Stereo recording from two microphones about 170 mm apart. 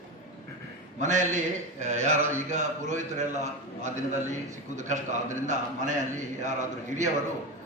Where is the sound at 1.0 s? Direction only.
45° right (ahead or behind).